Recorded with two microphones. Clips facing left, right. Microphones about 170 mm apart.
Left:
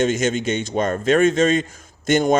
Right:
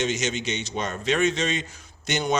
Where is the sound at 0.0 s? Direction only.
50° left (ahead or behind).